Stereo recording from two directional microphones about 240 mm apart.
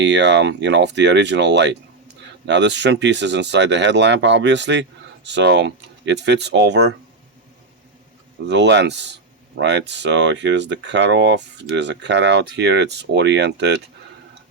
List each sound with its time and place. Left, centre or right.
0.0 s speech: right
8.4 s speech: right